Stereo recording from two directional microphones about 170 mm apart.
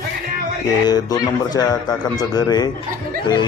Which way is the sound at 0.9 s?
25° left (ahead or behind).